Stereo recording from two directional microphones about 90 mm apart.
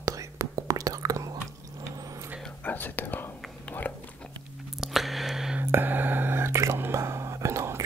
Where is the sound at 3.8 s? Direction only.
20° left (ahead or behind).